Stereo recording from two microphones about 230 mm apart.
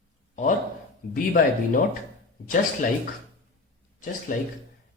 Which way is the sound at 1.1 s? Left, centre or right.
Left.